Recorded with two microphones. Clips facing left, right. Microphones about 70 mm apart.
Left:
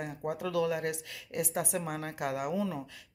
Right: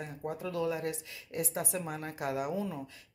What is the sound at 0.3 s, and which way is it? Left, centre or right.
A woman's voice, left.